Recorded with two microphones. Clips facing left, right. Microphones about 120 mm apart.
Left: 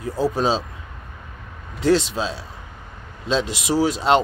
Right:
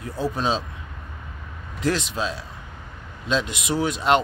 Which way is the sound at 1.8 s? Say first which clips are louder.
Left 6 dB; 30° left (ahead or behind).